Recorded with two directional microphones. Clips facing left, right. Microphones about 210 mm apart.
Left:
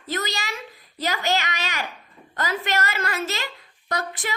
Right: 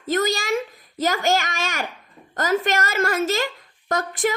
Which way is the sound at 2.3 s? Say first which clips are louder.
Right 5 dB; 45° right (ahead or behind).